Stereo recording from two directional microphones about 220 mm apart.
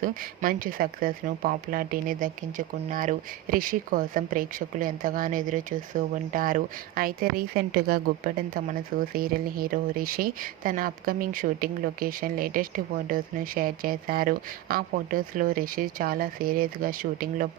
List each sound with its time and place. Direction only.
0.0 s speech: 40° right (ahead or behind)